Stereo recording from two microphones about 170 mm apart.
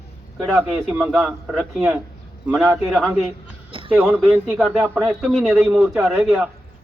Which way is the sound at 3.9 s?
10° right (ahead or behind).